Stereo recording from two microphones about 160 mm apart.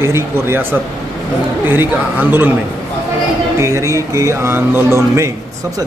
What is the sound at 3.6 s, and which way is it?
Speech, 20° right (ahead or behind).